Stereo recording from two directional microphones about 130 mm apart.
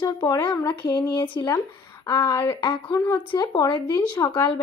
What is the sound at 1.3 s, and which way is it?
Speech, 35° left (ahead or behind).